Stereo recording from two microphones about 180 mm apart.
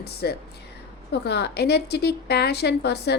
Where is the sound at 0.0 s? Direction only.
60° left (ahead or behind).